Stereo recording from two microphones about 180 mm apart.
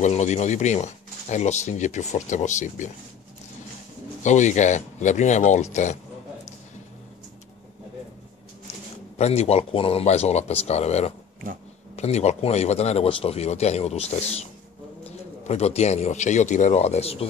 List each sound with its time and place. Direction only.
0.0 s speech: 40° left (ahead or behind)
4.2 s speech: 40° left (ahead or behind)
9.2 s speech: 35° left (ahead or behind)